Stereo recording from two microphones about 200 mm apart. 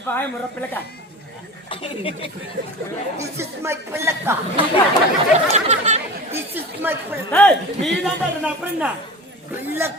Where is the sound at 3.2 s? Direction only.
15° right (ahead or behind).